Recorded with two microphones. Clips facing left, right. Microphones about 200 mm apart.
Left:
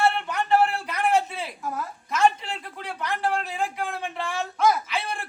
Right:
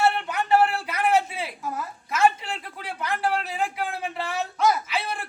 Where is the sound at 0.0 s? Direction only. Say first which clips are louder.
Even; 5° right (ahead or behind).